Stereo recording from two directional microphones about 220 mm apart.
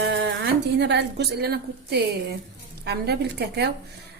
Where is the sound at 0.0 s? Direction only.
50° right (ahead or behind).